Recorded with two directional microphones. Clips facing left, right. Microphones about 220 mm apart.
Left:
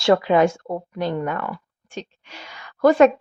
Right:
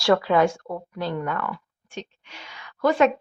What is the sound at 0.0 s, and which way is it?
A woman's voice, 20° left (ahead or behind).